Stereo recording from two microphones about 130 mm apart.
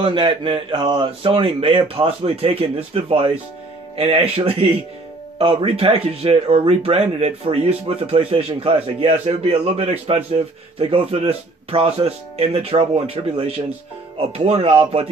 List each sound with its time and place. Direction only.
0.0 s speech: 40° right (ahead or behind)